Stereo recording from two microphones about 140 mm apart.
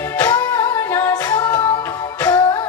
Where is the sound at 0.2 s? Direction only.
25° left (ahead or behind).